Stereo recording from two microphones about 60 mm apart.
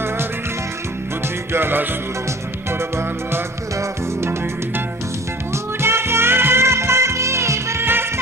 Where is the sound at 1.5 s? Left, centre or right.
Right.